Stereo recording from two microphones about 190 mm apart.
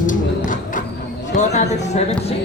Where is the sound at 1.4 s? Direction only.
35° left (ahead or behind).